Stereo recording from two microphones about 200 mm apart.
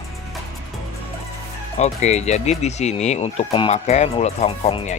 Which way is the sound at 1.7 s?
35° left (ahead or behind).